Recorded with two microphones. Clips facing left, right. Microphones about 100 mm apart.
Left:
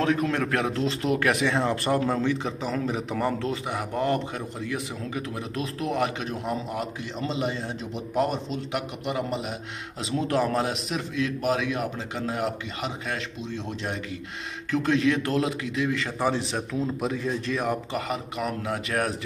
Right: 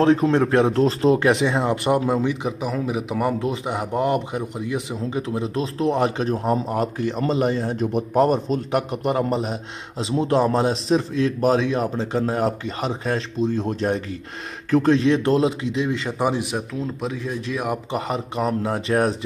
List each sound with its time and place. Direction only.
0.0 s a man's voice: 30° right (ahead or behind); by 16.6 s 15° right (ahead or behind)
16.8 s speech: centre (ahead or behind)
17.9 s a man's voice: 30° right (ahead or behind)